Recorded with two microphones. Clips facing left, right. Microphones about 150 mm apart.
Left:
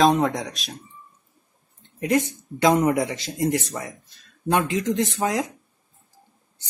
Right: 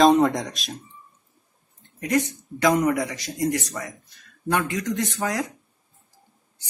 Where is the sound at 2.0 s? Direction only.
25° left (ahead or behind).